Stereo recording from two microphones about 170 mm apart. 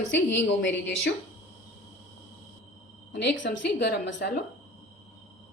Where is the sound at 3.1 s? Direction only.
85° left.